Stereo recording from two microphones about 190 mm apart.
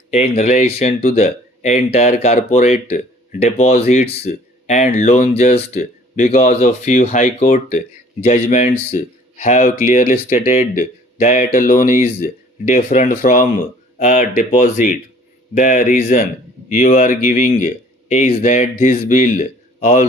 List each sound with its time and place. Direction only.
0.1 s speech: 35° left (ahead or behind)